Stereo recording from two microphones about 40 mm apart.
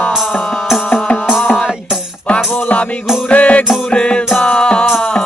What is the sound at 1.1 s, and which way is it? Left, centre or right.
Music, left.